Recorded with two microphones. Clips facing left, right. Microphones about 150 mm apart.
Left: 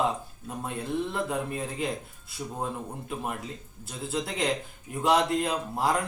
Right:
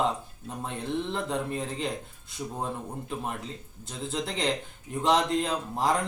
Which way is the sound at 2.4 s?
5° right (ahead or behind).